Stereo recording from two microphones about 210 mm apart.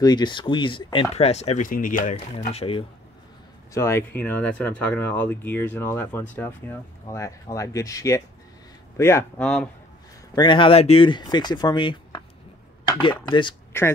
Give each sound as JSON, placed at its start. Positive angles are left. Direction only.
{"t": 0.0, "sound": "speech", "side_deg": 20}
{"t": 3.7, "sound": "speech", "side_deg": 10}
{"t": 10.3, "sound": "speech", "side_deg": 20}
{"t": 12.8, "sound": "chopping", "side_deg": 20}
{"t": 13.3, "sound": "speech", "side_deg": 20}